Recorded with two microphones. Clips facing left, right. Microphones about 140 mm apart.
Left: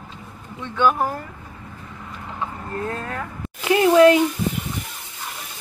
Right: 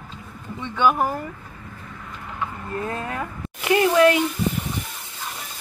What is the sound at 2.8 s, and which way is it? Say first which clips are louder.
Speech: left 1 dB; 15° right (ahead or behind).